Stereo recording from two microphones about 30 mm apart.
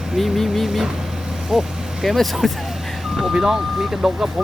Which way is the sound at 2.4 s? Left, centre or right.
Centre.